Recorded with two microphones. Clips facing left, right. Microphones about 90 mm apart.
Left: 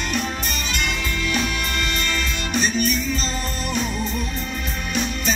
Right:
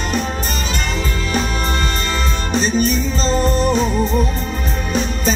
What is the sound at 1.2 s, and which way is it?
Music, 35° right (ahead or behind).